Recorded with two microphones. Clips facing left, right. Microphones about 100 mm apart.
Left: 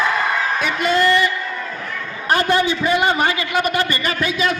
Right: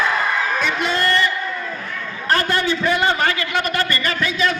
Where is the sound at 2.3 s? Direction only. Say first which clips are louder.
Left 2 dB; 15° left (ahead or behind).